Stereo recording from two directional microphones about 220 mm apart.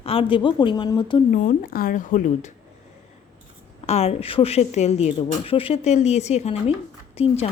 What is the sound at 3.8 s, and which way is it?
A woman's voice, 30° left (ahead or behind).